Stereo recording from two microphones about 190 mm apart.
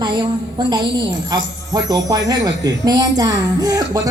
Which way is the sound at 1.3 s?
20° right (ahead or behind).